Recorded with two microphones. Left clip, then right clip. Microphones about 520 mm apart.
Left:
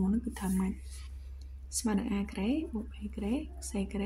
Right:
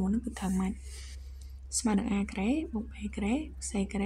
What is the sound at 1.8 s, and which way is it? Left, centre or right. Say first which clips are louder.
Speech: right 2 dB; left.